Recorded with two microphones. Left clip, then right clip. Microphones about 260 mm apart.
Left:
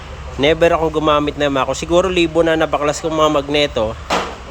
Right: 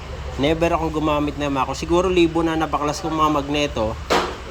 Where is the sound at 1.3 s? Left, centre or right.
Centre.